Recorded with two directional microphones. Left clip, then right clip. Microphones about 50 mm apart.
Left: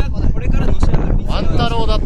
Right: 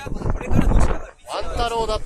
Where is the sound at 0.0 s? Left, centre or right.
Right.